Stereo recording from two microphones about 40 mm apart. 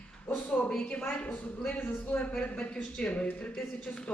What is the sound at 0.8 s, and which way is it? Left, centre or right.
A woman's voice, left.